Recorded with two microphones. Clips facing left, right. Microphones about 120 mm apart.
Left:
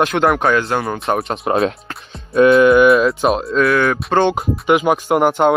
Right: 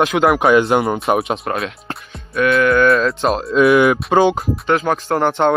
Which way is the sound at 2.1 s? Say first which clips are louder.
Left 6 dB; 25° left (ahead or behind).